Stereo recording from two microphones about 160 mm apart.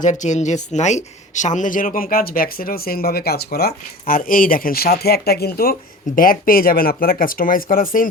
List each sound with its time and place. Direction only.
0.0 s speech: 50° left (ahead or behind); by 5.7 s 70° left (ahead or behind)
6.1 s speech: 60° left (ahead or behind)